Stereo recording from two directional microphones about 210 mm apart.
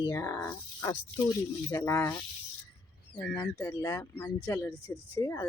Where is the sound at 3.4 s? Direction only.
15° left (ahead or behind).